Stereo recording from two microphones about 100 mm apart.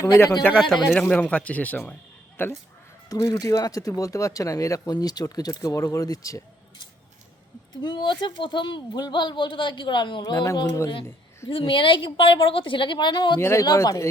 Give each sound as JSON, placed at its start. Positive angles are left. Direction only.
{"t": 0.0, "sound": "speech", "side_deg": 30}
{"t": 1.0, "sound": "speech", "side_deg": 15}
{"t": 3.1, "sound": "speech", "side_deg": 40}
{"t": 7.8, "sound": "speech", "side_deg": 50}
{"t": 10.4, "sound": "speech", "side_deg": 30}
{"t": 11.4, "sound": "a woman's voice", "side_deg": 60}
{"t": 13.4, "sound": "speech", "side_deg": 30}